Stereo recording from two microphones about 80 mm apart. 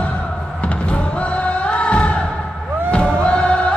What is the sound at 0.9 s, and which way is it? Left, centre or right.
Music, centre.